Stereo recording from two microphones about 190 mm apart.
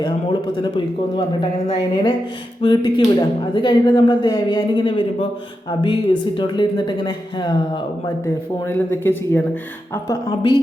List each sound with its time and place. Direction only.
0.0 s a man's voice: 25° left (ahead or behind)
8.6 s speech: 10° left (ahead or behind)